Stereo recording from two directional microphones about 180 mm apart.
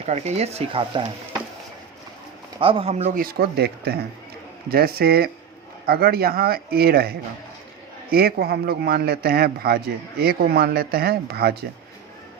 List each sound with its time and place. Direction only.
0.0 s speech: 35° right (ahead or behind)
2.6 s speech: 30° right (ahead or behind)
3.2 s a man's voice: 60° right (ahead or behind)